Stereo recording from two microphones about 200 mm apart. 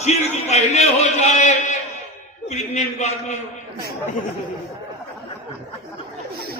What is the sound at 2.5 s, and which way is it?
Speech, 35° left (ahead or behind).